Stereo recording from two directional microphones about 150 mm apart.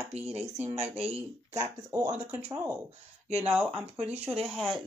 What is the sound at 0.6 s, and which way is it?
Speech, 15° right (ahead or behind).